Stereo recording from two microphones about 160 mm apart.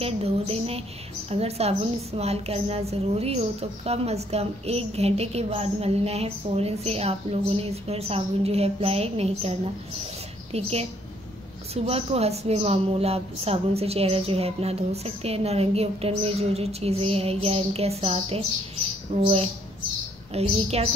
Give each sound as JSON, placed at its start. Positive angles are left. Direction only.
{"t": 0.0, "sound": "a woman's voice", "side_deg": -40}